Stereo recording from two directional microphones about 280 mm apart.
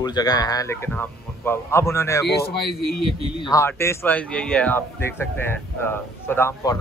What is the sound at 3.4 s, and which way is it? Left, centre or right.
A man's voice, centre.